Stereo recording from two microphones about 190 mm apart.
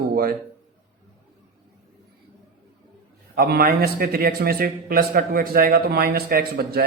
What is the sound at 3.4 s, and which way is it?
A man's voice, 50° right (ahead or behind).